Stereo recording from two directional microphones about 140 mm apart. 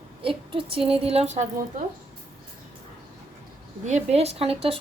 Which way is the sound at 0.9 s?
45° right (ahead or behind).